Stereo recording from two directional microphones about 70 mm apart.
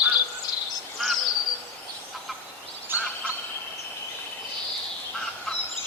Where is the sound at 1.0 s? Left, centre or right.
Centre.